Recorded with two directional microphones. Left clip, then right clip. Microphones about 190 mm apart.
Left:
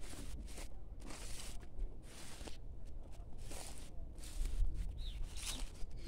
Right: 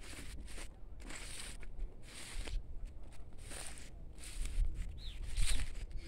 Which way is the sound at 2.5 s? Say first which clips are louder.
Right 3 dB; 15° right (ahead or behind).